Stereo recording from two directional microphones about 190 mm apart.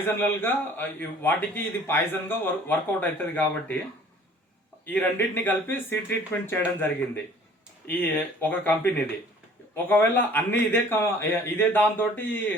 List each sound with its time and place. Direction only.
0.0 s a man's voice: 10° left (ahead or behind)
4.9 s a man's voice: 10° left (ahead or behind)
7.9 s a man's voice: 10° left (ahead or behind)